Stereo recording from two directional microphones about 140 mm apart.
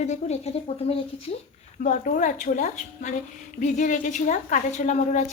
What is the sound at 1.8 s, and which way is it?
A woman's voice, 65° left (ahead or behind).